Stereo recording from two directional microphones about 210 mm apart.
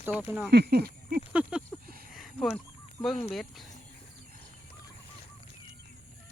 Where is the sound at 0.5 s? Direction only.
50° right (ahead or behind).